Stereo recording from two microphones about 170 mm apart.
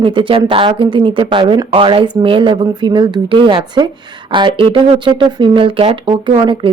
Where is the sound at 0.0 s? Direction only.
30° right (ahead or behind).